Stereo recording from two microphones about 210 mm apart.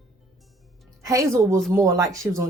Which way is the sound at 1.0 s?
15° right (ahead or behind).